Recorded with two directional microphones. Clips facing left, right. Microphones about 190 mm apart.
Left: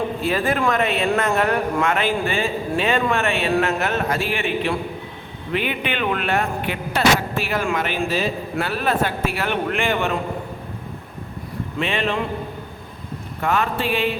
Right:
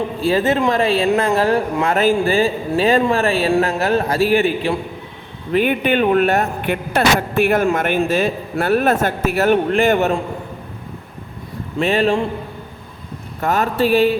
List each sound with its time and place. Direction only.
0.2 s a man's voice: 30° right (ahead or behind)
11.8 s speech: 40° right (ahead or behind)
13.4 s speech: 40° right (ahead or behind)